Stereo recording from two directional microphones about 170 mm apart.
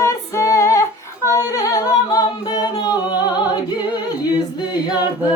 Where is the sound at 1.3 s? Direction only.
20° left (ahead or behind).